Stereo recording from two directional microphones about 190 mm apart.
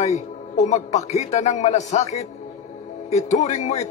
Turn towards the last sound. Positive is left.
turn(degrees=35)  # may be behind; listen again after turning